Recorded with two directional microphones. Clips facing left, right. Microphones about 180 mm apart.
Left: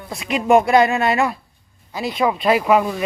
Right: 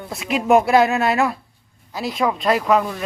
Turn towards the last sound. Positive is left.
turn(degrees=10)  # may be behind; listen again after turning